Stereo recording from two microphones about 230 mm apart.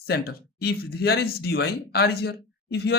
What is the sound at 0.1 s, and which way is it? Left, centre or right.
Speech, left.